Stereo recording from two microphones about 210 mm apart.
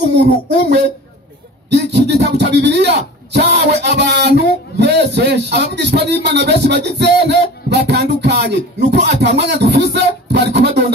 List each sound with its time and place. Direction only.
1.7 s a man's voice: 55° right (ahead or behind)